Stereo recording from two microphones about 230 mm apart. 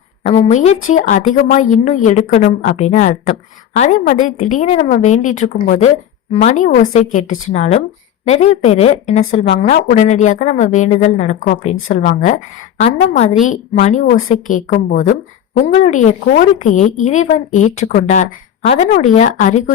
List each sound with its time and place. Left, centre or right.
0.2 s a woman's voice: left
13.4 s a woman's voice: left